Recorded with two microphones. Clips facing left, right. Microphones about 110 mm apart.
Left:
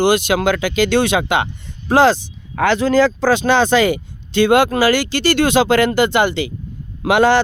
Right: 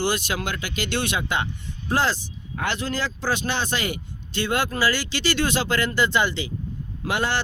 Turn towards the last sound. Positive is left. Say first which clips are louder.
# left 12 dB
turn(degrees=90)